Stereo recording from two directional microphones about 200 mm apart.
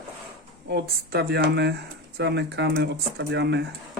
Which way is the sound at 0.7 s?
55° right (ahead or behind).